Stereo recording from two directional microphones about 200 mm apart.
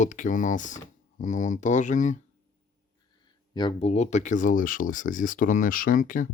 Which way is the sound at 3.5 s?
25° left (ahead or behind).